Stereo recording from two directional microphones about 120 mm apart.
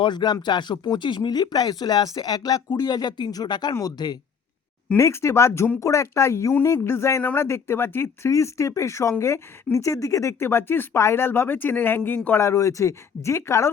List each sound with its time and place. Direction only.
0.0 s speech: 40° left (ahead or behind)
4.9 s speech: 25° left (ahead or behind)